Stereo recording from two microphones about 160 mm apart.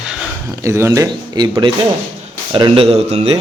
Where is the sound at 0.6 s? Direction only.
20° right (ahead or behind); by 3.4 s 40° right (ahead or behind).